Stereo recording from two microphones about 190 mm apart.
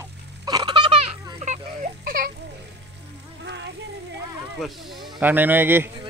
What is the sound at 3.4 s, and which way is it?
Music, 65° right (ahead or behind).